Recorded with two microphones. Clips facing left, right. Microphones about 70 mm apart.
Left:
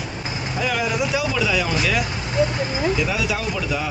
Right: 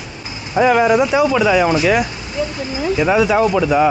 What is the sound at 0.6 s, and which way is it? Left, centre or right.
Speech, right.